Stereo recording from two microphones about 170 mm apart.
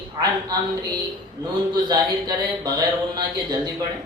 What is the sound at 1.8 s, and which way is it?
A woman's voice, 25° right (ahead or behind).